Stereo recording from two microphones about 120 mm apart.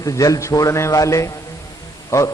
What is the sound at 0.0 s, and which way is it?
A man's voice, 30° left (ahead or behind).